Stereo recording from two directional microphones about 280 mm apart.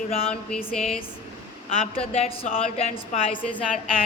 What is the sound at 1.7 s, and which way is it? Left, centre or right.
A woman's voice, left.